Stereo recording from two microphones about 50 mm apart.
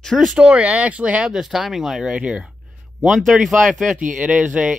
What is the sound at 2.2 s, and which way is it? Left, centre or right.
Speech, right.